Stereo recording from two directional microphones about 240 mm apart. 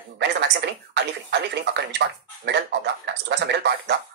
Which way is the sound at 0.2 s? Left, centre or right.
Right.